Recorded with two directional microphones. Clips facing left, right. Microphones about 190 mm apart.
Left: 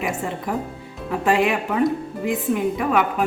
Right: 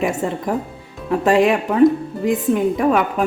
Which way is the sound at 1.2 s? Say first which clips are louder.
Right 4 dB; 35° right (ahead or behind).